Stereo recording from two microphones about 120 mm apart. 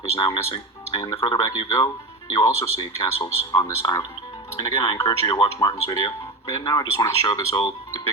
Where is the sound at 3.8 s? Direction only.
35° left (ahead or behind).